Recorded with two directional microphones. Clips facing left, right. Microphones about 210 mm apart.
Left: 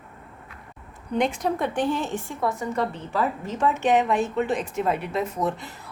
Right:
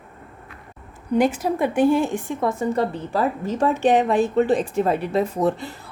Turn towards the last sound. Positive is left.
turn(degrees=-30)  # may be behind; listen again after turning